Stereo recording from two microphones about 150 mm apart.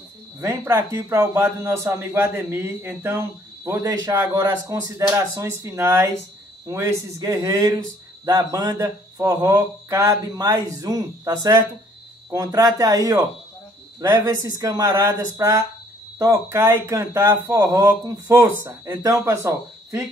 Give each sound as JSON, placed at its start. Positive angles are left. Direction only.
{"t": 0.4, "sound": "a man's voice", "side_deg": -15}